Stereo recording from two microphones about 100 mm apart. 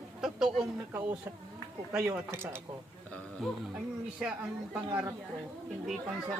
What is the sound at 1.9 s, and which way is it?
Speech, 25° right (ahead or behind).